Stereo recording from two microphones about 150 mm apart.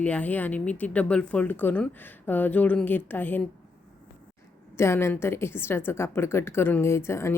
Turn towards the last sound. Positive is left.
turn(degrees=15)  # may be behind; listen again after turning